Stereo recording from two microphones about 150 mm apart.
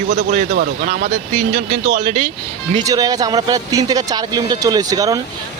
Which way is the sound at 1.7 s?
35° right (ahead or behind).